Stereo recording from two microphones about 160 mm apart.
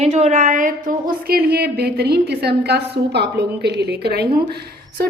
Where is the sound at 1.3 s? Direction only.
75° right (ahead or behind).